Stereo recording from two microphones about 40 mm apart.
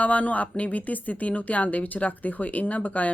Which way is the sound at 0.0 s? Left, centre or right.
Left.